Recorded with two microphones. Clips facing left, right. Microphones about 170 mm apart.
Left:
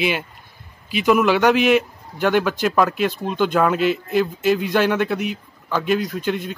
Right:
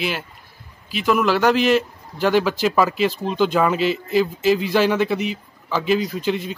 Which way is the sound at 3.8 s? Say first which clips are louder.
Left 1 dB; 55° left (ahead or behind).